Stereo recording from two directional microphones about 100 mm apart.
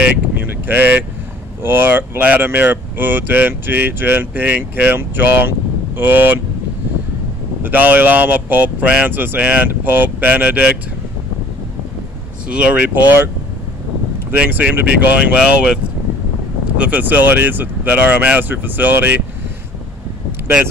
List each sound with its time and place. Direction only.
0.0 s a sound: 20° right (ahead or behind)
1.6 s speech: 20° right (ahead or behind)
7.6 s speech: 20° right (ahead or behind)
12.4 s speech: 10° right (ahead or behind)
14.3 s speech: 15° right (ahead or behind)